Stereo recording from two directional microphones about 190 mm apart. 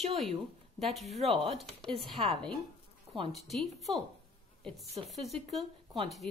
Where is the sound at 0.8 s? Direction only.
Centre (ahead or behind).